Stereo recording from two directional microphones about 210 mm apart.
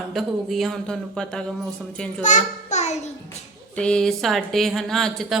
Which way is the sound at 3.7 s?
5° left (ahead or behind).